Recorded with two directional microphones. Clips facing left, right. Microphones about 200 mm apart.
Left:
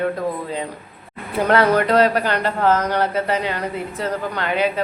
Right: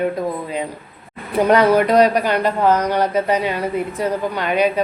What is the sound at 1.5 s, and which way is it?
Speech, 15° right (ahead or behind).